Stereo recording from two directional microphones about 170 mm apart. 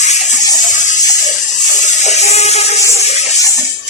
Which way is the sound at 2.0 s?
40° left (ahead or behind).